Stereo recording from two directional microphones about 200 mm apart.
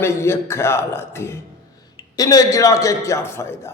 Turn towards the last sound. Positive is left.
turn(degrees=15)  # may be behind; listen again after turning